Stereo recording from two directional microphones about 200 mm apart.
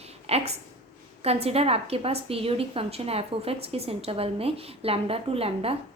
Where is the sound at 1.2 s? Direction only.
30° right (ahead or behind).